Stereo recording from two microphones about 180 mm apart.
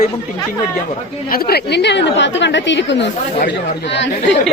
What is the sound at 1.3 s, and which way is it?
A woman's voice, 60° left (ahead or behind).